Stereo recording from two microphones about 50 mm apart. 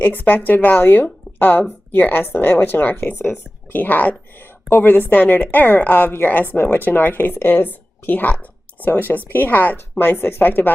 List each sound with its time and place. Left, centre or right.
0.0 s a woman's voice: left